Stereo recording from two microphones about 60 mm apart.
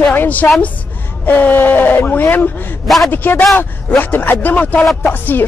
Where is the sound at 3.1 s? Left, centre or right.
Left.